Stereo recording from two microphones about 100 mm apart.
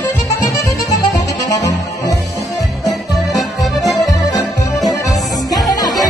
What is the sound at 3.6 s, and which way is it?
Music, centre (ahead or behind).